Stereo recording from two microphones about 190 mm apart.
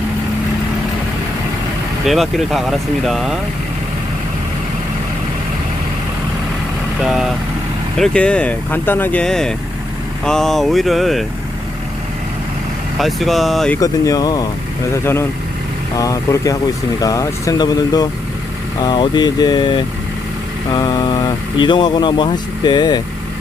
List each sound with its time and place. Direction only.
2.0 s speech: centre (ahead or behind)
7.0 s speech: centre (ahead or behind)
13.0 s speech: centre (ahead or behind)
13.7 s speech: 15° left (ahead or behind)